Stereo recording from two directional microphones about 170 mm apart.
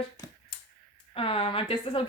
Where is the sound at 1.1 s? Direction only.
35° left (ahead or behind).